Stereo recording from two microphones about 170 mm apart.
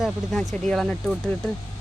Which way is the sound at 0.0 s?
Centre (ahead or behind).